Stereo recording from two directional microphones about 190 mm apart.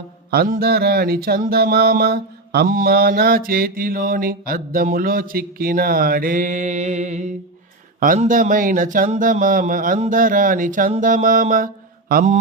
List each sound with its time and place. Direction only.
0.3 s speech: 50° right (ahead or behind)